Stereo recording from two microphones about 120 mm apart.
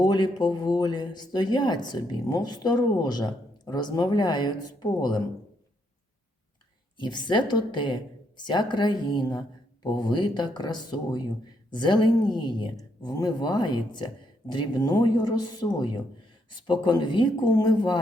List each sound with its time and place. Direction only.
0.0 s speech: 40° left (ahead or behind)
6.9 s speech: 40° left (ahead or behind)